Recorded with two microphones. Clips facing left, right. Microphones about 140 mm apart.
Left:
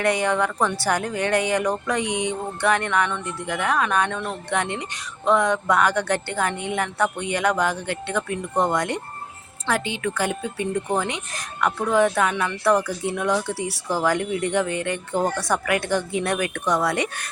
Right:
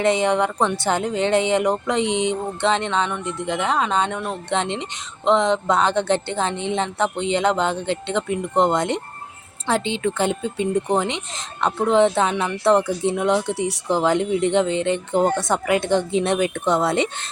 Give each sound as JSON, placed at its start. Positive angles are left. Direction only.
{"t": 0.0, "sound": "speech", "side_deg": -20}